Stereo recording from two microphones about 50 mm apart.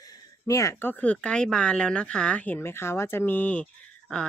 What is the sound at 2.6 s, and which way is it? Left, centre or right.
Speech, left.